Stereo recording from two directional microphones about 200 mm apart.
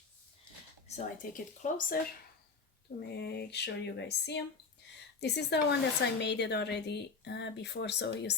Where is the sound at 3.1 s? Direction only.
55° left (ahead or behind).